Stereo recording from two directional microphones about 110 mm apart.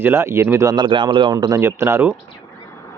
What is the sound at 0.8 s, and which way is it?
Speech, 50° right (ahead or behind).